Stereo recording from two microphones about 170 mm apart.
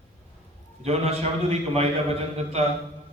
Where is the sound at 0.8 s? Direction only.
40° right (ahead or behind).